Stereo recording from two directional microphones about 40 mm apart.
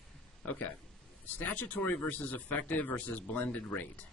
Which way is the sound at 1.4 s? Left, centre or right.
Left.